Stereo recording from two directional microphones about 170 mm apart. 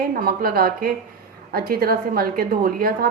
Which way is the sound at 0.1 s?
60° right (ahead or behind).